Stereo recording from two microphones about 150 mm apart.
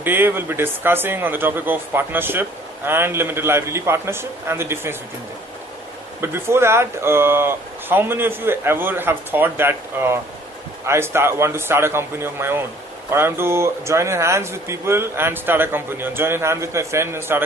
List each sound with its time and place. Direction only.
0.0 s a man's voice: 15° right (ahead or behind)
6.2 s a man's voice: 15° right (ahead or behind)